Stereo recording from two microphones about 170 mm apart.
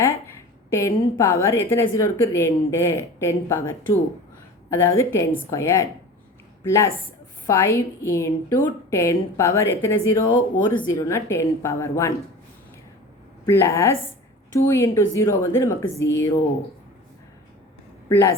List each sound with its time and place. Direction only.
0.7 s a woman's voice: 20° left (ahead or behind)
13.4 s a woman's voice: 15° left (ahead or behind)
18.1 s a woman's voice: 15° left (ahead or behind)